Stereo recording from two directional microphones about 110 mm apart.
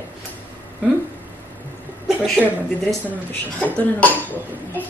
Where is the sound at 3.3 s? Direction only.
15° left (ahead or behind).